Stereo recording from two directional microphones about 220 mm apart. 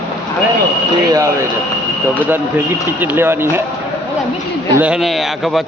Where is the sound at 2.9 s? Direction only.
10° right (ahead or behind).